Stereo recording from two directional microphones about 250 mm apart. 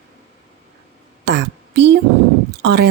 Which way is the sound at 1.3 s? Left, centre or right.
Right.